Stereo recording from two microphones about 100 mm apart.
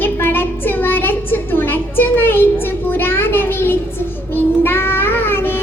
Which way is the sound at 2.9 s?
20° left (ahead or behind).